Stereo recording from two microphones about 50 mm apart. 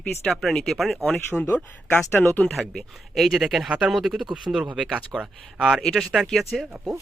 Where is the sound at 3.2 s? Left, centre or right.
Centre.